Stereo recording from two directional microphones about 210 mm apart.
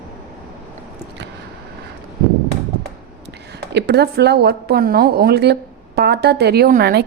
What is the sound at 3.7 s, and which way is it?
A woman's voice, 50° right (ahead or behind).